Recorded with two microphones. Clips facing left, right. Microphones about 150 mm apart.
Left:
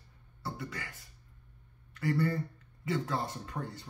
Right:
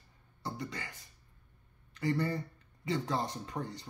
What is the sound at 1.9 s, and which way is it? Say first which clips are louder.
Speech: left 2 dB; 20° right (ahead or behind).